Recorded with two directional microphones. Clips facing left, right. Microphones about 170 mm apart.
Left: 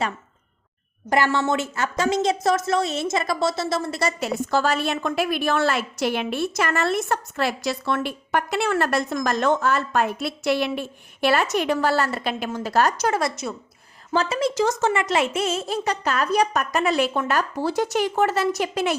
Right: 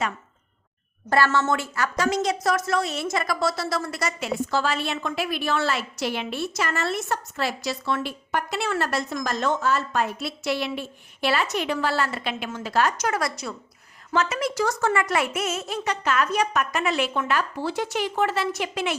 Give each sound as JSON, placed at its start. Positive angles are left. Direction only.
{"t": 1.1, "sound": "a woman's voice", "side_deg": 15}
{"t": 4.2, "sound": "a woman's voice", "side_deg": 45}